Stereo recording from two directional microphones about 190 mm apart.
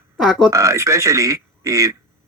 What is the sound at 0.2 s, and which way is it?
Speech, 5° right (ahead or behind).